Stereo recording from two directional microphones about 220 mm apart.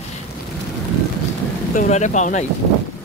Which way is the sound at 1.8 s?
35° left (ahead or behind).